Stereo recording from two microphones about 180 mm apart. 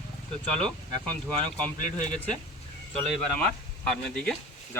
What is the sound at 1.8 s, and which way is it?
Speech, 40° left (ahead or behind).